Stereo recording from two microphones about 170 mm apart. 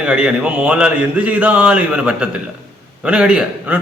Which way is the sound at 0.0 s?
5° right (ahead or behind).